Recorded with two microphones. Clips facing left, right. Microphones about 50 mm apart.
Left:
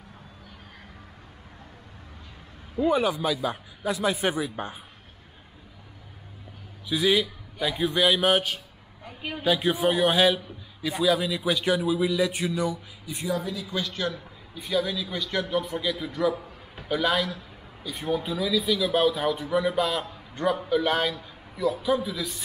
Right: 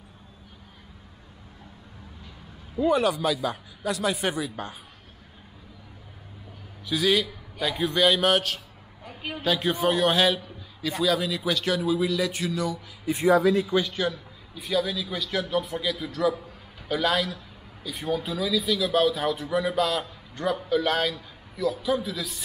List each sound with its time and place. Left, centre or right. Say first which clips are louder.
2.8 s a man's voice: right 1 dB; centre
6.9 s a man's voice: even; centre
13.0 s a woman's voice: right 12 dB; right
13.3 s speech: right 10 dB; right
13.7 s a man's voice: right 4 dB; centre
14.5 s a man's voice: even; centre
20.1 s a sound: left 2 dB; centre
20.6 s a man's voice: right 3 dB; centre